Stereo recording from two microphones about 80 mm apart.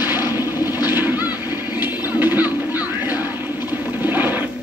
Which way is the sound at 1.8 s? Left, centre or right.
Right.